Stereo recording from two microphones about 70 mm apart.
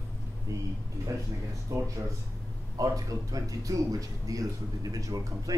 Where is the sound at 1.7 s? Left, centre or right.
Right.